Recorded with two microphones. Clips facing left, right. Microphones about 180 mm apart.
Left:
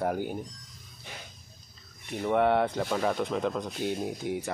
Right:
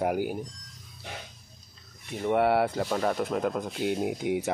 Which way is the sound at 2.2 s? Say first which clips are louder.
Right 1 dB; 5° right (ahead or behind).